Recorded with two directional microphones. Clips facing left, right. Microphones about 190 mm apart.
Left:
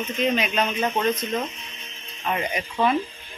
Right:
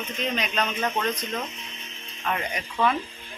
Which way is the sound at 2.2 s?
15° left (ahead or behind).